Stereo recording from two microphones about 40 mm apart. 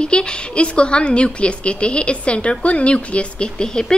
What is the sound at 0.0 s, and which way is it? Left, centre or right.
A woman's voice, left.